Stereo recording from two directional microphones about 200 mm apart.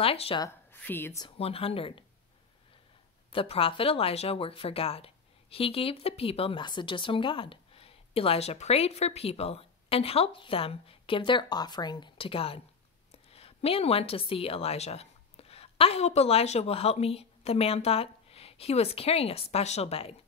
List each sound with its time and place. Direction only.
0.0 s speech: 30° left (ahead or behind)
0.5 s a woman's voice: 10° left (ahead or behind)
1.2 s speech: 30° left (ahead or behind)
3.3 s a woman's voice: 25° left (ahead or behind)